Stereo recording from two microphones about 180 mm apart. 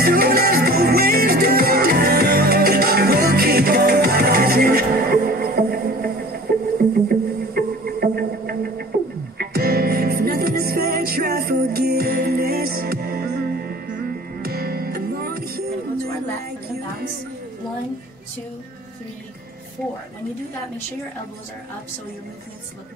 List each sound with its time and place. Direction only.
0.0 s music: 55° right (ahead or behind)